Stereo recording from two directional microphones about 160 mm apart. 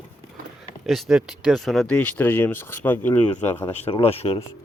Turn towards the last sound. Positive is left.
turn(degrees=40)  # may be behind; listen again after turning